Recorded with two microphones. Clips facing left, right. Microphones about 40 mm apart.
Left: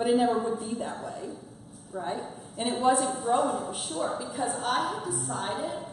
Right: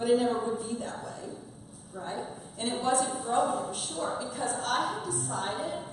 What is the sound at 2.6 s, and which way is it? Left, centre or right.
A woman's voice, centre.